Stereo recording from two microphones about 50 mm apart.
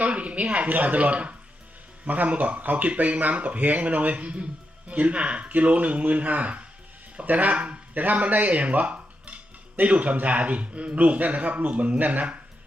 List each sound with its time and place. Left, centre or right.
0.0 s speech: right